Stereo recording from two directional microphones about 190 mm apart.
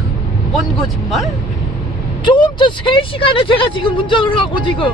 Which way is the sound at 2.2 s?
25° left (ahead or behind).